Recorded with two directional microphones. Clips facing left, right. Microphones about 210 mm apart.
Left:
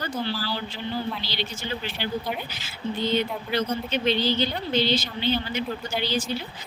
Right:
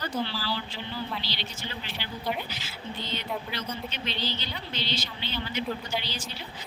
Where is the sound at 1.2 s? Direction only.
50° left (ahead or behind).